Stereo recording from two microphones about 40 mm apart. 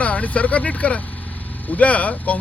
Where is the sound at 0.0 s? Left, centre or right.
Left.